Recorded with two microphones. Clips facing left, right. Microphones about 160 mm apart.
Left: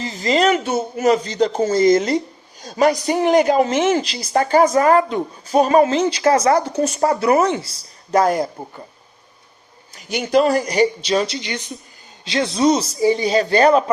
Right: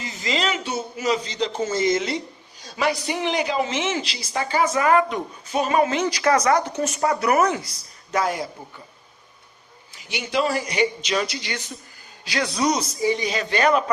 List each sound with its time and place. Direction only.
0.0 s a man's voice: 35° left (ahead or behind)
8.2 s speech: 45° left (ahead or behind)
9.9 s speech: 45° left (ahead or behind)
11.3 s a man's voice: 20° left (ahead or behind)